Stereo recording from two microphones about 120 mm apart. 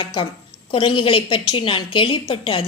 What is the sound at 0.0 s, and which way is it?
A woman's voice, 40° left (ahead or behind).